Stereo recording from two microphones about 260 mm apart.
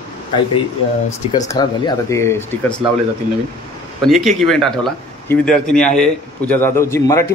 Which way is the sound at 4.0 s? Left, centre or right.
Centre.